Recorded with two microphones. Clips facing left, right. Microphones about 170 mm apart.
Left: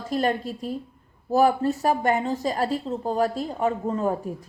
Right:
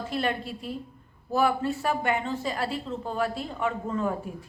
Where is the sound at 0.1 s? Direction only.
40° left (ahead or behind).